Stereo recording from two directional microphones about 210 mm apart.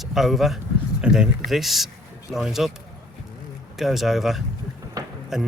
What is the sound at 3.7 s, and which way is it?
Speech, centre (ahead or behind).